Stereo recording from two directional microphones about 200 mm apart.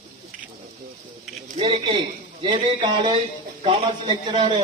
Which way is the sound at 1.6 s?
25° right (ahead or behind).